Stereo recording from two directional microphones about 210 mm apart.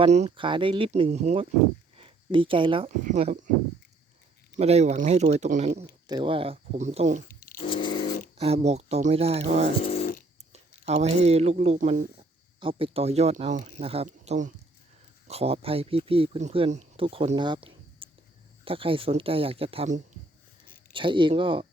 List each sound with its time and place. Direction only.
0.0 s speech: 30° right (ahead or behind)
4.5 s speech: 30° right (ahead or behind)
6.1 s speech: 20° right (ahead or behind)
7.3 s a sound: 40° left (ahead or behind)
7.6 s scratch: 25° left (ahead or behind)
8.4 s speech: 30° right (ahead or behind)
9.8 s a sound: 30° left (ahead or behind)
10.5 s speech: 30° right (ahead or behind)
12.5 s speech: 25° right (ahead or behind)